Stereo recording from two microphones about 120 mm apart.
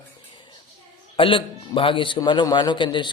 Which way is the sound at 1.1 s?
45° left (ahead or behind).